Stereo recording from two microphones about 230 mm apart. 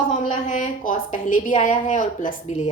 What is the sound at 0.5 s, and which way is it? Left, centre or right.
A woman's voice, left.